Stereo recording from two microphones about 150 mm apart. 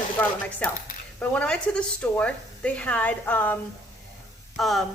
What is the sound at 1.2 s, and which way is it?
A woman's voice, 5° left (ahead or behind).